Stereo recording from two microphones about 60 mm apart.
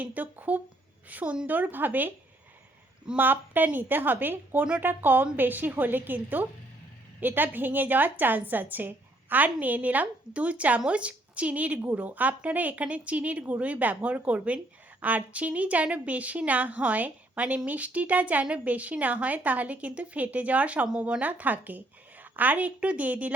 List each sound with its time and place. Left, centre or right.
0.0 s a woman's voice: right
3.2 s a woman's voice: right; by 21.2 s centre
21.2 s a woman's voice: right